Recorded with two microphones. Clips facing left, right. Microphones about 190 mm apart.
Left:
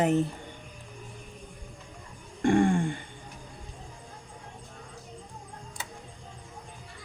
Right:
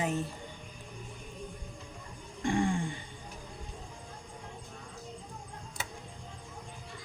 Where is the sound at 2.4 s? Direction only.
60° left (ahead or behind).